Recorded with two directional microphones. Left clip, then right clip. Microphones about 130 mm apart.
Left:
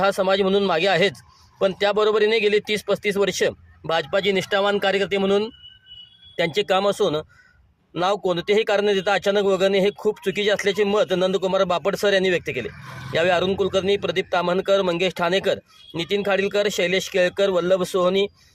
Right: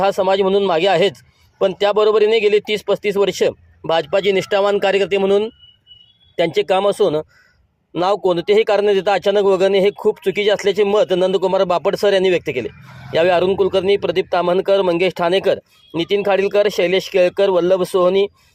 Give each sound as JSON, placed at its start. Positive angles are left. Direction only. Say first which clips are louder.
{"t": 0.0, "sound": "a man's voice", "louder": "right 4 dB", "side_deg": -20}